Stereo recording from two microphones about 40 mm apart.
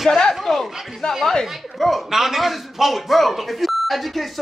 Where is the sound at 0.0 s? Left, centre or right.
Centre.